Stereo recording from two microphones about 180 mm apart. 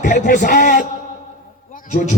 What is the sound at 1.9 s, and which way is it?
Speech, 40° left (ahead or behind).